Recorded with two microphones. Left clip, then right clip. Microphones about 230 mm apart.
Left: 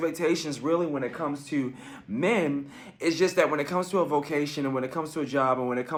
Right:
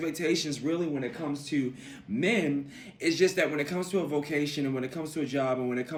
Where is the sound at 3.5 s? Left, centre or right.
Centre.